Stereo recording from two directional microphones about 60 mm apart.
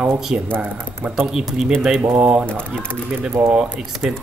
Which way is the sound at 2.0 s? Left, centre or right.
Centre.